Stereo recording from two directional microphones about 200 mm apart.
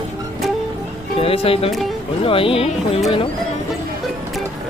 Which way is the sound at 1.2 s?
30° left (ahead or behind).